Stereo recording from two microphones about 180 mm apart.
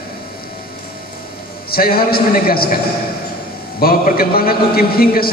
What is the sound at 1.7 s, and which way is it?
A man's voice, 55° left (ahead or behind).